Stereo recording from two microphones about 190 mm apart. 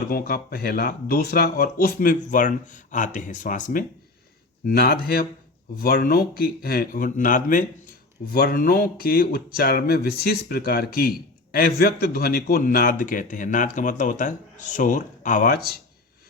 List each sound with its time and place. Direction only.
0.1 s a man's voice: 50° left (ahead or behind)